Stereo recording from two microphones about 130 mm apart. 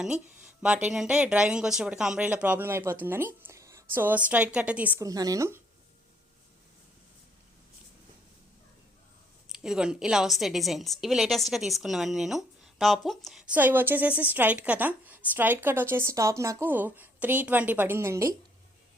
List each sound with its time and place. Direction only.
0.0 s speech: 5° right (ahead or behind)
4.9 s a woman's voice: 30° right (ahead or behind)
9.5 s a woman's voice: 5° right (ahead or behind); by 18.3 s 20° right (ahead or behind)